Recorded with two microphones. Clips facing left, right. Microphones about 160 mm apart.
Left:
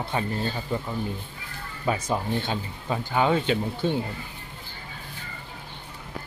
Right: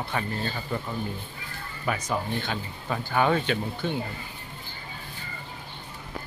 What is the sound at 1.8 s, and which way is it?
Speech, 25° left (ahead or behind).